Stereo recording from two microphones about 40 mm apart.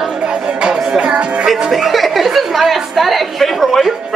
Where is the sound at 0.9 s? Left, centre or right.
Right.